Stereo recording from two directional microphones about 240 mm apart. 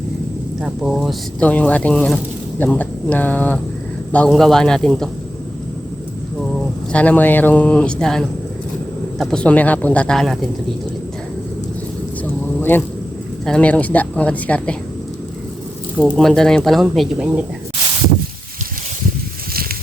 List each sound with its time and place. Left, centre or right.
0.6 s speech: centre
6.9 s speech: centre
12.5 s a sound: centre
13.4 s speech: centre
16.0 s speech: centre